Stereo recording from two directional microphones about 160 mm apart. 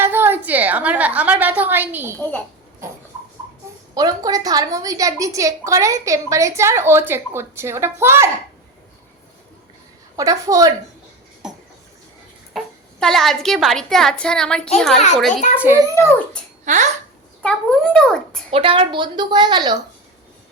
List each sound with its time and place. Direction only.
0.0 s a woman's voice: 15° right (ahead or behind)
3.9 s a woman's voice: 25° right (ahead or behind)
10.2 s a woman's voice: 20° right (ahead or behind)
11.4 s a sound: 5° right (ahead or behind)
12.5 s a woman's voice: 5° left (ahead or behind)
15.3 s a child's voice: 50° left (ahead or behind)
15.5 s a child's voice: 10° right (ahead or behind)
16.0 s dog: 10° left (ahead or behind)
16.6 s a child's voice: 50° right (ahead or behind)
17.4 s a woman's voice: 5° left (ahead or behind)
18.5 s a woman's voice: 35° right (ahead or behind)